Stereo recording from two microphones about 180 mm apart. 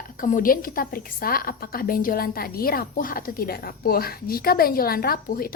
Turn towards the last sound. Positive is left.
turn(degrees=55)  # may be behind; listen again after turning